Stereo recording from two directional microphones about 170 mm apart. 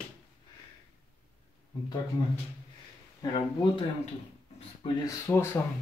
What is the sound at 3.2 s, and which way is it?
Speech, 30° left (ahead or behind).